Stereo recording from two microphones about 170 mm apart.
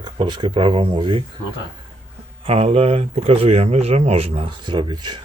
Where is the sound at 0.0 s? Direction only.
25° right (ahead or behind).